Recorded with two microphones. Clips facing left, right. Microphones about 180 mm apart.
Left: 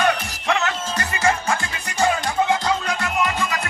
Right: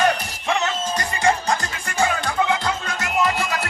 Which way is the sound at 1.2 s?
35° right (ahead or behind).